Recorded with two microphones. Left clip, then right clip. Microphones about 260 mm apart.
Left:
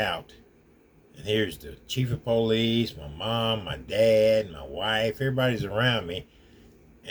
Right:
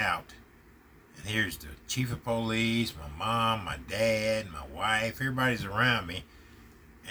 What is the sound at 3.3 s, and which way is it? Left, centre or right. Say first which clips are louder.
Speech: left 1 dB; centre.